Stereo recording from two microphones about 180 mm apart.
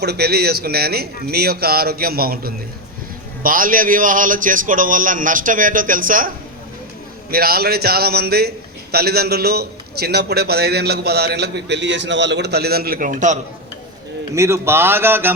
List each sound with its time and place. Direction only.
0.0 s a man's voice: 65° right (ahead or behind); by 13.4 s 45° right (ahead or behind)
14.3 s speech: 15° right (ahead or behind)